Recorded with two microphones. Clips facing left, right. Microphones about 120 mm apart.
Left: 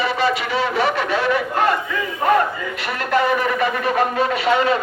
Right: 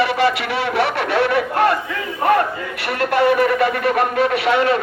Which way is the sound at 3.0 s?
65° right (ahead or behind).